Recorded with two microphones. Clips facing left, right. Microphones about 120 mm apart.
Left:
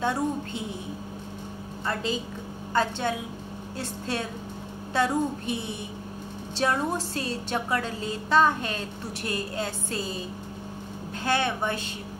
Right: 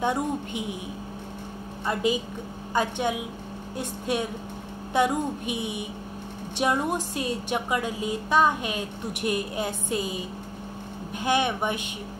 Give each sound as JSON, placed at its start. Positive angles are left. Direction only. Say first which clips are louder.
{"t": 0.0, "sound": "a woman's voice", "louder": "right 1 dB", "side_deg": -15}
{"t": 1.9, "sound": "a woman's voice", "louder": "right 4 dB", "side_deg": -15}